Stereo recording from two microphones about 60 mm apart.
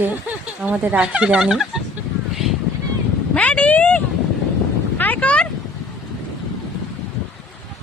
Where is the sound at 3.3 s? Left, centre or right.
Left.